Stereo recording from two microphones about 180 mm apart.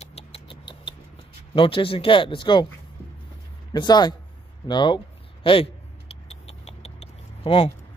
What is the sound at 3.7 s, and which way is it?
Speech, 25° left (ahead or behind).